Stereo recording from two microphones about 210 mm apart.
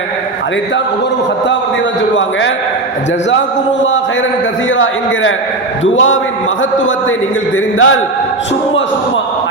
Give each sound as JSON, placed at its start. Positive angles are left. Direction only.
{"t": 4.7, "sound": "a man's voice", "side_deg": 65}
{"t": 7.5, "sound": "a man's voice", "side_deg": 65}